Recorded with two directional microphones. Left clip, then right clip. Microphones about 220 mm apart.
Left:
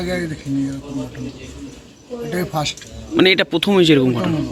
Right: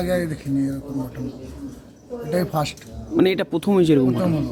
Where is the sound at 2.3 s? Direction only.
20° right (ahead or behind).